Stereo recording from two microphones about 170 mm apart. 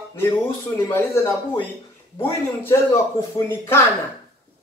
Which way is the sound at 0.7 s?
15° left (ahead or behind).